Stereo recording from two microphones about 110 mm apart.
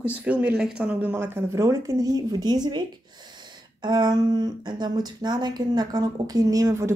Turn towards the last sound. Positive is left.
turn(degrees=-30)  # may be behind; listen again after turning